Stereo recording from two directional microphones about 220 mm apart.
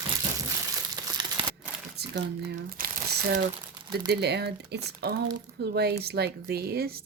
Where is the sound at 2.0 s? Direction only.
45° right (ahead or behind).